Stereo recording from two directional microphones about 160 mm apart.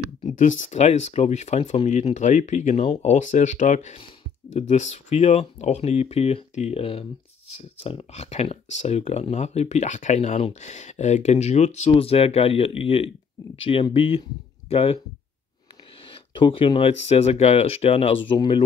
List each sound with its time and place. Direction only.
0.4 s speech: 45° left (ahead or behind)
16.1 s speech: 30° left (ahead or behind)